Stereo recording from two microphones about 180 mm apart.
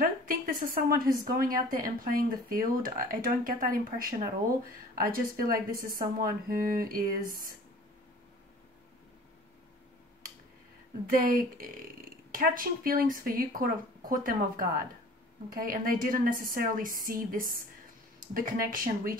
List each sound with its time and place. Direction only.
0.0 s a woman's voice: 50° right (ahead or behind)
11.1 s a woman's voice: 50° right (ahead or behind)